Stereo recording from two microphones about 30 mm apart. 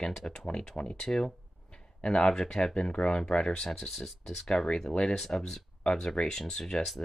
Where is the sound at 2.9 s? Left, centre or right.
Left.